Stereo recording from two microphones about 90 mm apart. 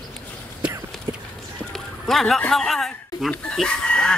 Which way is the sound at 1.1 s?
35° right (ahead or behind).